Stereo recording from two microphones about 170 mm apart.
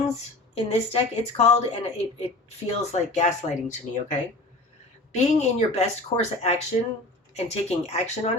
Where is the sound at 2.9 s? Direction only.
45° left (ahead or behind).